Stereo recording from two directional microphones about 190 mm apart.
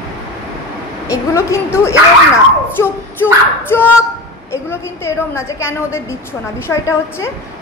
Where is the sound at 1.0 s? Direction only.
15° left (ahead or behind).